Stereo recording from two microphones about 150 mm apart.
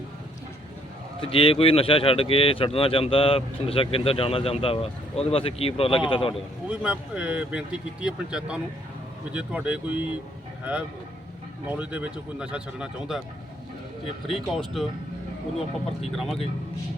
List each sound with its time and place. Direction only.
1.2 s speech: 35° left (ahead or behind)
6.3 s speech: 5° right (ahead or behind)
11.7 s speech: 10° right (ahead or behind)
14.3 s speech: centre (ahead or behind)
16.1 s speech: centre (ahead or behind)